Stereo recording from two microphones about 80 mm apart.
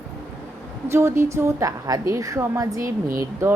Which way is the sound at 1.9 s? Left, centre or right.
Right.